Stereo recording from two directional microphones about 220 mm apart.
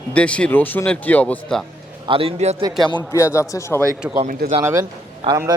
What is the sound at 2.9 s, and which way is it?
Speech, 15° left (ahead or behind).